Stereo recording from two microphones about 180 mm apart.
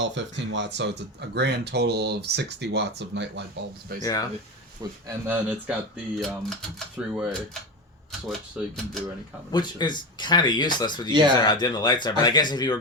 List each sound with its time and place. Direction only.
0.0 s speech: 90° right; by 3.4 s 75° right (ahead or behind)
4.0 s speech: 20° left (ahead or behind)
5.3 s speech: 5° right (ahead or behind)
8.3 s speech: centre (ahead or behind)
9.5 s speech: 25° left (ahead or behind)